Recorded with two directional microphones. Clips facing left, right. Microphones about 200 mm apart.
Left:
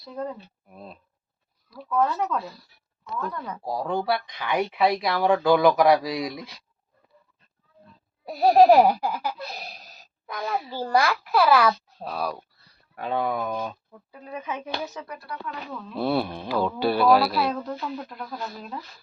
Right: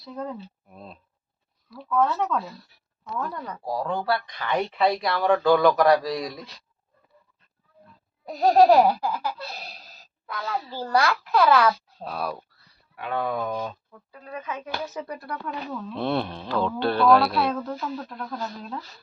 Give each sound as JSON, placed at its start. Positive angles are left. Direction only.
{"t": 0.0, "sound": "speech", "side_deg": 0}
{"t": 3.4, "sound": "laughter", "side_deg": 10}
{"t": 8.3, "sound": "laughter", "side_deg": 10}
{"t": 12.0, "sound": "speech", "side_deg": 0}
{"t": 13.1, "sound": "laughter", "side_deg": 15}
{"t": 13.9, "sound": "laughter", "side_deg": 15}
{"t": 15.2, "sound": "speech", "side_deg": -50}
{"t": 16.0, "sound": "laughter", "side_deg": 5}
{"t": 18.2, "sound": "speech", "side_deg": 5}